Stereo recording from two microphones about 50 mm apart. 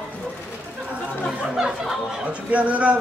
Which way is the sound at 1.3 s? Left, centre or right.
Centre.